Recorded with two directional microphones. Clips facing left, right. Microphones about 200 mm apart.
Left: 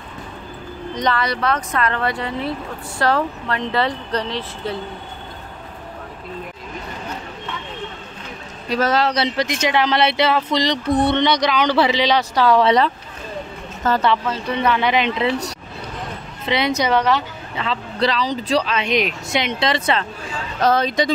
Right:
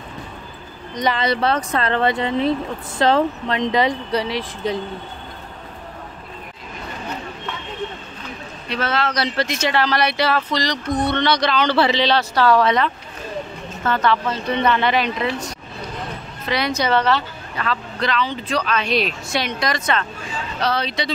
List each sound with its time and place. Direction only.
1.0 s speech: 20° right (ahead or behind)
8.6 s a man's voice: 40° left (ahead or behind)
9.1 s speech: 20° left (ahead or behind)
12.6 s a man's voice: 35° left (ahead or behind)
14.2 s speech: 5° left (ahead or behind)
15.0 s speech: 25° left (ahead or behind)
16.4 s speech: 20° left (ahead or behind)
17.9 s speech: 35° left (ahead or behind)
20.6 s speech: 45° left (ahead or behind)